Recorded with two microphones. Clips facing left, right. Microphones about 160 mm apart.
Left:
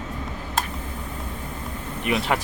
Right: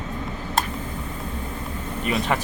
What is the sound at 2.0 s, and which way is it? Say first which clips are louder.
Speech: even; 10° left (ahead or behind).